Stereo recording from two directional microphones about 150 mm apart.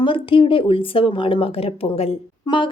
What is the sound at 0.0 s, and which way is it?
Speech, 35° left (ahead or behind).